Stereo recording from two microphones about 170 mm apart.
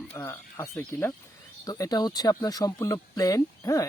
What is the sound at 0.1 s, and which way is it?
Speech, 15° left (ahead or behind).